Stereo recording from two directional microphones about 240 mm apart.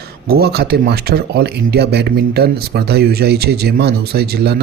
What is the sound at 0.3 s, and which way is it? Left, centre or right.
Speech, right.